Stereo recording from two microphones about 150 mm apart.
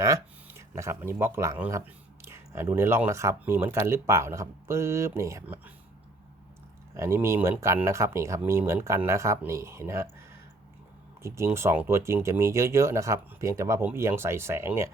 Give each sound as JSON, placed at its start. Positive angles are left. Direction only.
{"t": 0.0, "sound": "speech", "side_deg": -20}
{"t": 6.9, "sound": "speech", "side_deg": -15}
{"t": 11.2, "sound": "speech", "side_deg": -20}